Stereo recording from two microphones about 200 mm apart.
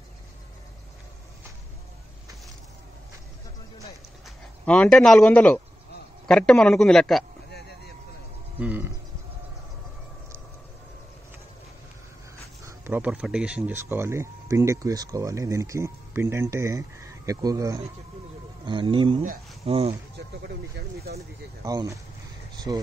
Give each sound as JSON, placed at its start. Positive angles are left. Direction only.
{"t": 4.6, "sound": "a man's voice", "side_deg": 5}
{"t": 8.5, "sound": "speech", "side_deg": -10}
{"t": 12.6, "sound": "speech", "side_deg": -10}
{"t": 20.2, "sound": "speech", "side_deg": -55}
{"t": 21.6, "sound": "speech", "side_deg": -20}